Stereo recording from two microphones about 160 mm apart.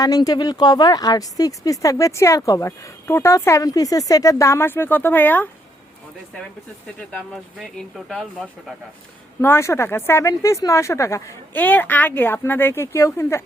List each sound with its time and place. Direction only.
0.0 s speech: 25° left (ahead or behind)
7.5 s speech: centre (ahead or behind)
9.4 s speech: 15° left (ahead or behind)